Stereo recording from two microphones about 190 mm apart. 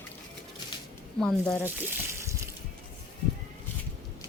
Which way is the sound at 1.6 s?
10° right (ahead or behind).